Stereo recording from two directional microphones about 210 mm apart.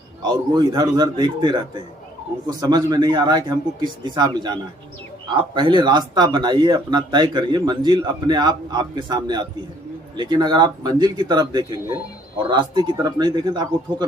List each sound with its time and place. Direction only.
0.2 s speech: 20° right (ahead or behind)